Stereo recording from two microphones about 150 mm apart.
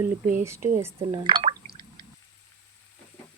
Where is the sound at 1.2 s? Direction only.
40° right (ahead or behind).